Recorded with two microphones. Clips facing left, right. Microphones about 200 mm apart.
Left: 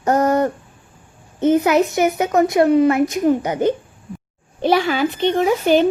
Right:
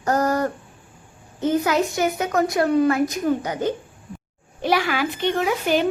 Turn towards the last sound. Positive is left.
turn(degrees=25)  # may be behind; listen again after turning